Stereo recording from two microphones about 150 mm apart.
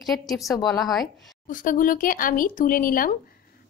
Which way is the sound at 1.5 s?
60° left (ahead or behind).